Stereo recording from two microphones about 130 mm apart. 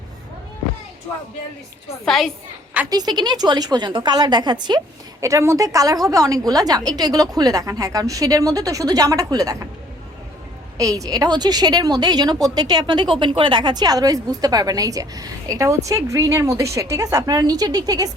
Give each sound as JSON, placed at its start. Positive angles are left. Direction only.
{"t": 2.0, "sound": "a woman's voice", "side_deg": 0}
{"t": 2.9, "sound": "a woman's voice", "side_deg": -30}
{"t": 5.2, "sound": "a woman's voice", "side_deg": -25}
{"t": 10.8, "sound": "a woman's voice", "side_deg": -25}